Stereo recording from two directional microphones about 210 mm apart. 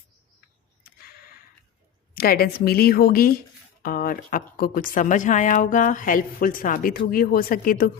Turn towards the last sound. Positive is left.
turn(degrees=45)  # may be behind; listen again after turning